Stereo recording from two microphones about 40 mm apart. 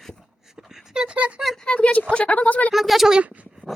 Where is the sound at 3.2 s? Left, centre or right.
Right.